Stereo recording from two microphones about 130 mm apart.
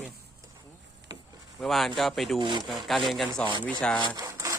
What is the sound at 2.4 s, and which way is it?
Speech, 35° right (ahead or behind).